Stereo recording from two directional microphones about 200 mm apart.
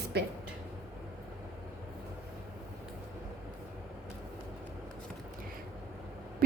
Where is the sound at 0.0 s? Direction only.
55° right (ahead or behind).